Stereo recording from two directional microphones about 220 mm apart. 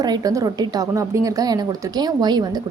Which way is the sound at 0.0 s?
15° right (ahead or behind).